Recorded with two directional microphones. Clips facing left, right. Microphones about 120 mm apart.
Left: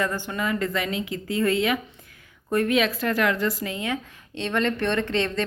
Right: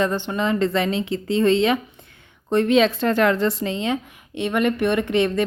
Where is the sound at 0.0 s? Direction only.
25° right (ahead or behind).